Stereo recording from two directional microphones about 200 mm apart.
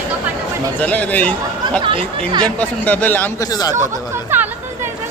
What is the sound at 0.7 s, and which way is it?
Speech, 5° left (ahead or behind).